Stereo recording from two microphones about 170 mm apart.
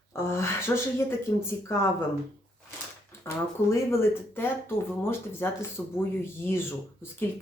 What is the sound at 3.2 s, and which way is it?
A woman's voice, 15° left (ahead or behind).